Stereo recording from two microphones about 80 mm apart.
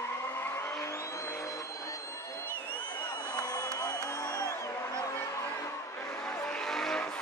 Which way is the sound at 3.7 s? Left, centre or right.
Left.